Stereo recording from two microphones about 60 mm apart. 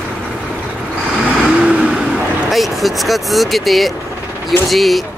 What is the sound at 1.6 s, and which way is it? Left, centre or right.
Vehicle, centre.